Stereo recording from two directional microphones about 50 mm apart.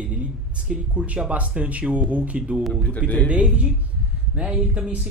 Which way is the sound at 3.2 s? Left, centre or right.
Right.